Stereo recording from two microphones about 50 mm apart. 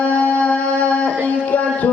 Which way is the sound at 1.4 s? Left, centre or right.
Left.